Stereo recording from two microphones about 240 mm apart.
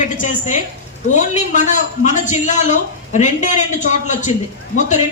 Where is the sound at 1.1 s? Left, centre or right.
Left.